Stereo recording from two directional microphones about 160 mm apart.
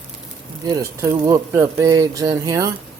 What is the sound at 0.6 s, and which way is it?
Speech, 20° right (ahead or behind).